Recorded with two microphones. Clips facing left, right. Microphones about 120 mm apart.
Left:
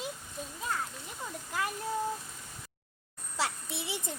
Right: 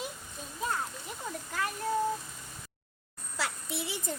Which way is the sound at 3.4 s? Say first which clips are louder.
Left 1 dB; 25° left (ahead or behind).